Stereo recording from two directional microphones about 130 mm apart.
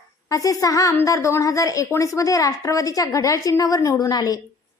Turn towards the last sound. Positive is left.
turn(degrees=30)  # may be behind; listen again after turning